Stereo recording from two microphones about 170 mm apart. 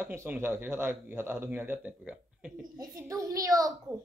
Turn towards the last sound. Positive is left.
turn(degrees=-20)  # may be behind; listen again after turning